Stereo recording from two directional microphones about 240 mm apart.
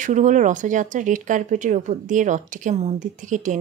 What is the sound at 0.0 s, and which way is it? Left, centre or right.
Speech, right.